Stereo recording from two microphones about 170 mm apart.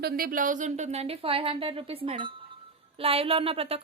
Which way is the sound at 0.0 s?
55° right (ahead or behind).